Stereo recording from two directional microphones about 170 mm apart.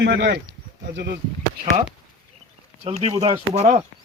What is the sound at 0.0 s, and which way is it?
Speech, 90° right.